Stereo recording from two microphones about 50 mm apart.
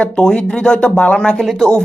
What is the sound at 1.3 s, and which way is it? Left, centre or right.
Speech, centre.